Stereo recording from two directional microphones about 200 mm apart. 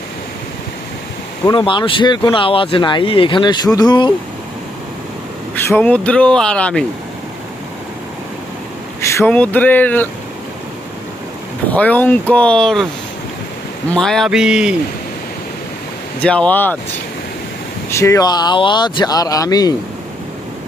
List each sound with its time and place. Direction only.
1.5 s speech: 25° left (ahead or behind)
5.6 s speech: 10° left (ahead or behind)
9.0 s speech: 15° left (ahead or behind)
11.7 s speech: 10° left (ahead or behind)
13.9 s speech: centre (ahead or behind)
16.2 s speech: 5° left (ahead or behind)
17.9 s speech: 15° left (ahead or behind)